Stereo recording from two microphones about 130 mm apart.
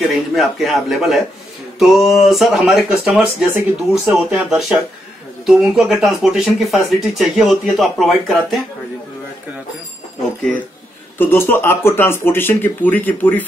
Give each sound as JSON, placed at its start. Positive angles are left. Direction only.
{"t": 0.0, "sound": "speech", "side_deg": 0}
{"t": 11.1, "sound": "speech", "side_deg": 15}